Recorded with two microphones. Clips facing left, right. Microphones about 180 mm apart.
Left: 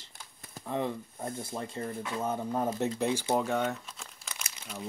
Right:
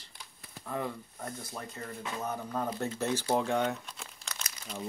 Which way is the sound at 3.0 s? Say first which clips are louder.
Right 2 dB; 15° left (ahead or behind).